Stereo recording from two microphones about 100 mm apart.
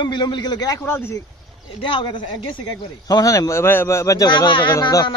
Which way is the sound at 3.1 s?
35° left (ahead or behind).